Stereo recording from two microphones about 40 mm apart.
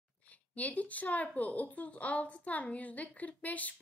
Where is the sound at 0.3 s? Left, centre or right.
Left.